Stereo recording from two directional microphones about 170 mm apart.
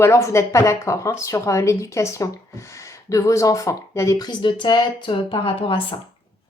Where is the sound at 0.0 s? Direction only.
15° left (ahead or behind).